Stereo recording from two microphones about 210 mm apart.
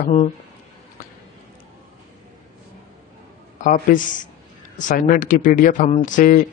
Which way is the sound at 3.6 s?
40° left (ahead or behind).